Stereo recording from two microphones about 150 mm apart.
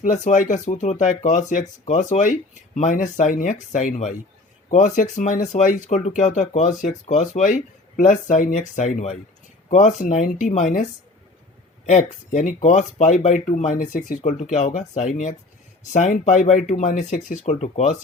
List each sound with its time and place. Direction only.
0.0 s speech: 60° left (ahead or behind)
11.9 s speech: 50° left (ahead or behind)